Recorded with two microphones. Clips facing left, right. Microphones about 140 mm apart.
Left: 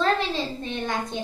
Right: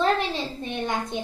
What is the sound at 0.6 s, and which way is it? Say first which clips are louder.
Speech: right 1 dB; 15° right (ahead or behind).